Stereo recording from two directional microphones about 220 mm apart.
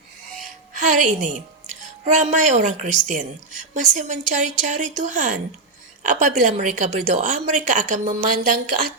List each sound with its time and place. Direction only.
0.7 s a woman's voice: 35° right (ahead or behind)